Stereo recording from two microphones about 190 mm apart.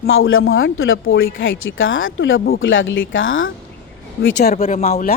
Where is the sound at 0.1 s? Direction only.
90° left.